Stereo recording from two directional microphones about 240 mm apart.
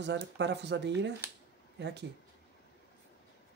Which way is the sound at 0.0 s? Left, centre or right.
Right.